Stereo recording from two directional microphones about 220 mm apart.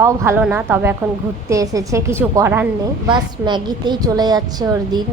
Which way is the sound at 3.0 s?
20° right (ahead or behind).